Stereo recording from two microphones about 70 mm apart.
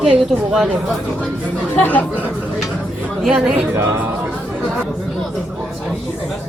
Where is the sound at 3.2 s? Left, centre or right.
Centre.